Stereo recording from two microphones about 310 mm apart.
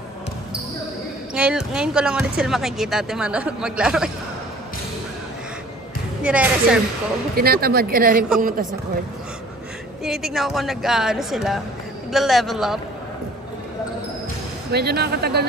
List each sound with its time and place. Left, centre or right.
1.3 s speech: centre
6.2 s speech: centre
7.3 s speech: right
10.0 s speech: centre
14.7 s speech: right